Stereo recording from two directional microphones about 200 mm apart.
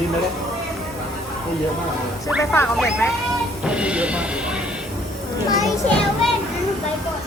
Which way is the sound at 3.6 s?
5° right (ahead or behind).